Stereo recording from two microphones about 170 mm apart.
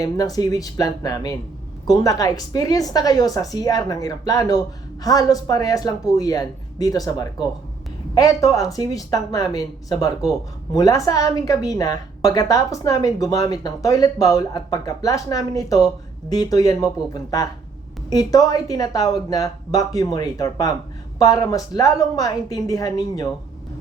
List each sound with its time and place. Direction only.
0.0 s a woman's voice: 20° left (ahead or behind)